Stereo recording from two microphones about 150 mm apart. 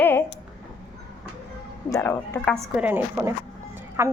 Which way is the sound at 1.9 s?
15° left (ahead or behind).